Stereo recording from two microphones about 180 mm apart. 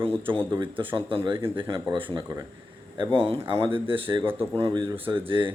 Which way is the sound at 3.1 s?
30° right (ahead or behind).